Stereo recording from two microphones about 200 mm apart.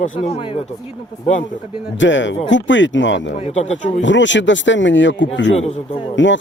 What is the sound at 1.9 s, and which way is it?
Speech, 65° left (ahead or behind).